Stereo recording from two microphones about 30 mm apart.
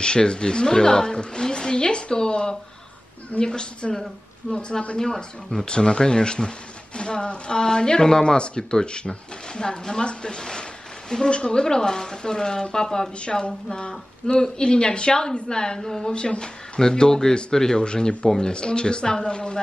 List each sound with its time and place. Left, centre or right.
0.0 s speech: left
16.1 s speech: left